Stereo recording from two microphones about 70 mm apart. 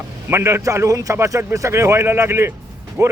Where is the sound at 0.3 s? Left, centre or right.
Right.